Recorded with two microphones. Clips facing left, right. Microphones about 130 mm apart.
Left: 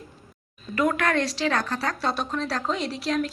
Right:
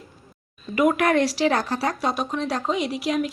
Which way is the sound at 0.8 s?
20° right (ahead or behind).